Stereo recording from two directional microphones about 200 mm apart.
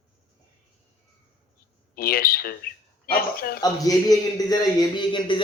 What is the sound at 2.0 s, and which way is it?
Speech, 50° left (ahead or behind).